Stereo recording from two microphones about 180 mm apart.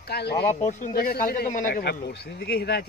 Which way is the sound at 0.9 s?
55° left (ahead or behind).